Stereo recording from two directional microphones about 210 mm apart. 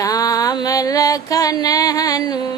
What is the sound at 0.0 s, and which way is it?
Music, 15° left (ahead or behind).